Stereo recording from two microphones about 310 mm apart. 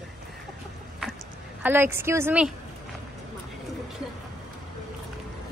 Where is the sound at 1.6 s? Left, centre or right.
Centre.